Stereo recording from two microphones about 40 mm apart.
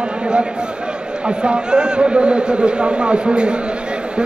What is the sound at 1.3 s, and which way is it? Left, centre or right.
A man's voice, right.